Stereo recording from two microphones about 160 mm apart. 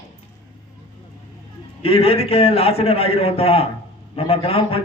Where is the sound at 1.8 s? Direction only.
40° left (ahead or behind).